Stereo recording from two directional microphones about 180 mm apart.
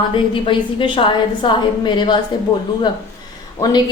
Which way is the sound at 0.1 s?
30° left (ahead or behind).